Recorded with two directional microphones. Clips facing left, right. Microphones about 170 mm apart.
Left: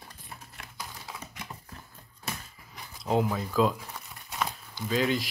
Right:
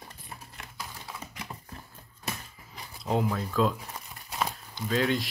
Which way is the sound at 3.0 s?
Centre (ahead or behind).